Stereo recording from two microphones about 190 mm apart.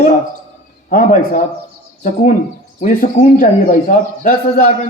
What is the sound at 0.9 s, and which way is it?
Speech, 45° left (ahead or behind).